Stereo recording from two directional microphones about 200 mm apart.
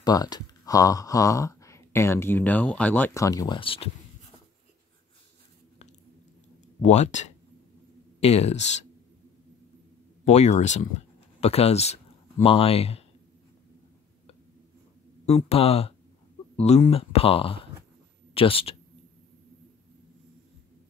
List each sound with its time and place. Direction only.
0.0 s speech: 20° left (ahead or behind)
6.8 s speech: 35° left (ahead or behind)
10.2 s speech: 35° left (ahead or behind)
15.2 s speech: 30° left (ahead or behind)